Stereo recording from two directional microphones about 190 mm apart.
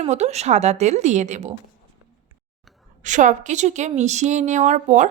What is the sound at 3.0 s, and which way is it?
A woman's voice, 40° right (ahead or behind).